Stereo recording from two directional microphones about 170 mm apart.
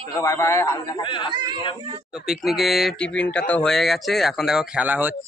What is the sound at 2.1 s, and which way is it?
Speech, centre (ahead or behind).